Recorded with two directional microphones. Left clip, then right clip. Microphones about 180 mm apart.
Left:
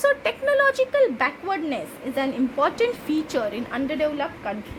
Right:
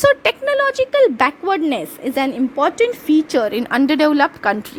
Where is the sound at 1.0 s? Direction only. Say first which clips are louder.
Right 7 dB; 50° right (ahead or behind).